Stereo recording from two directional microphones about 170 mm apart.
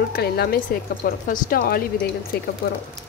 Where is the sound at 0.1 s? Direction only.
65° left (ahead or behind).